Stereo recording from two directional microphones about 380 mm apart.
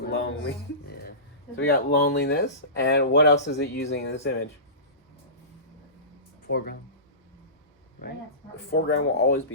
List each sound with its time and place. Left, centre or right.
0.0 s a sound: left
1.5 s speech: left
6.5 s speech: left
8.7 s speech: left